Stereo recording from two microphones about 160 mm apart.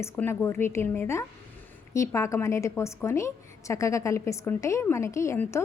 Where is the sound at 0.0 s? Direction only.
15° left (ahead or behind).